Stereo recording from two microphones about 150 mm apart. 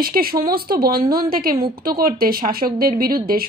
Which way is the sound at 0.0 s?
80° right.